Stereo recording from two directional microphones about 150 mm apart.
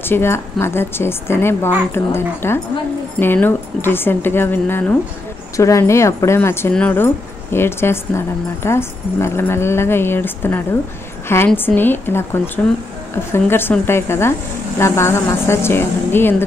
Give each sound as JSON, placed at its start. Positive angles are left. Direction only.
{"t": 0.0, "sound": "speech", "side_deg": 15}